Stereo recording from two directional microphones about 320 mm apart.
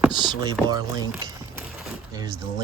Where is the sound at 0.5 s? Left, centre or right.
Centre.